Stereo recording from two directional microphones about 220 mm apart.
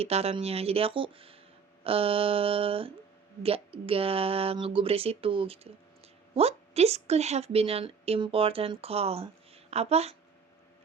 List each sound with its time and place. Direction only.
0.0 s a woman's voice: 30° right (ahead or behind)